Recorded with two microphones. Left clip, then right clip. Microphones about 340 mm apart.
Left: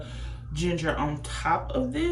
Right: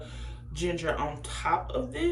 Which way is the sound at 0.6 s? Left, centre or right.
Centre.